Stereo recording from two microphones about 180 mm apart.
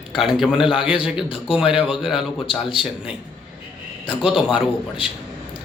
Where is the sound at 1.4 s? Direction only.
5° right (ahead or behind).